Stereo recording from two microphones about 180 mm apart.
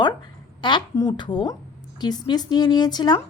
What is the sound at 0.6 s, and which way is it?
A woman's voice, 25° left (ahead or behind).